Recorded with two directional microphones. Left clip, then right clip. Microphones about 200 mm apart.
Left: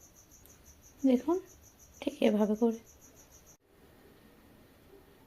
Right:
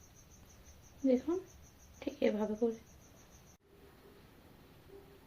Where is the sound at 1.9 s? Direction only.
40° left (ahead or behind).